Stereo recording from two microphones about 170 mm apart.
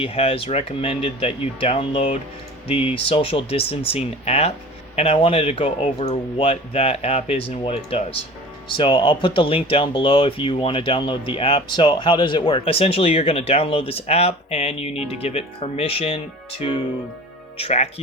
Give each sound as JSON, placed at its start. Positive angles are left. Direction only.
{"t": 0.0, "sound": "speech", "side_deg": 35}